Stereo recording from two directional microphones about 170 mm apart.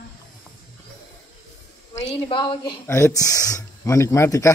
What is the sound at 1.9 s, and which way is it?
Speech, 30° left (ahead or behind).